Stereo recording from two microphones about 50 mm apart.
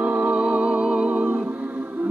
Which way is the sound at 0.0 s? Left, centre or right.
Right.